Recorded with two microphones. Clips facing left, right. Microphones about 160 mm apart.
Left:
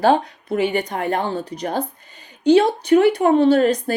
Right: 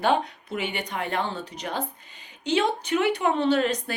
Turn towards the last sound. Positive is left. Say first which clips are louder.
# left 8 dB
turn(degrees=40)  # may be behind; listen again after turning